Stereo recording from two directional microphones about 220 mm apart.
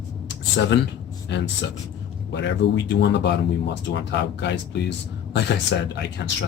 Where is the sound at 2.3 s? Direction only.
55° left (ahead or behind).